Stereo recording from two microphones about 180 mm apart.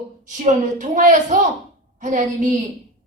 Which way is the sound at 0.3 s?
45° right (ahead or behind).